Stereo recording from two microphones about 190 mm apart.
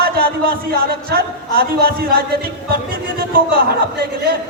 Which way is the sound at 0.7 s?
55° right (ahead or behind).